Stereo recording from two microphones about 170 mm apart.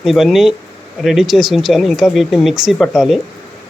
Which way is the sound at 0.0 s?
Centre (ahead or behind).